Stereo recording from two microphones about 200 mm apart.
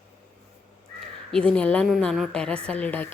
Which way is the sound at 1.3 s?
5° left (ahead or behind).